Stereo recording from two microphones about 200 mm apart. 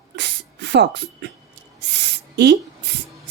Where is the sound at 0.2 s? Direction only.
60° right (ahead or behind).